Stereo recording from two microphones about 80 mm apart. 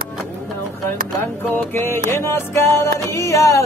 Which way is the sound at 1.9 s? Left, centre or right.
Left.